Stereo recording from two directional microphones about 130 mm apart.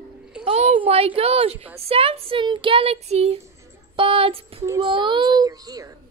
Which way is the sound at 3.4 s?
20° right (ahead or behind).